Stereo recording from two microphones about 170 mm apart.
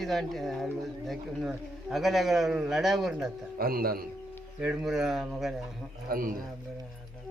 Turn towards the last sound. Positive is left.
turn(degrees=-60)  # may be behind; listen again after turning